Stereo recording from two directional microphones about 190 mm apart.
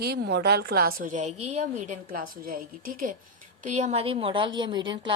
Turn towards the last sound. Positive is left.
turn(degrees=-25)  # may be behind; listen again after turning